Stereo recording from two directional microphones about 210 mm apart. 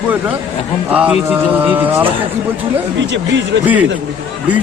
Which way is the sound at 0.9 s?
5° right (ahead or behind).